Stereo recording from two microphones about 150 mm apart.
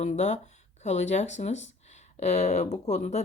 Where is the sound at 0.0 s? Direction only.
50° left (ahead or behind).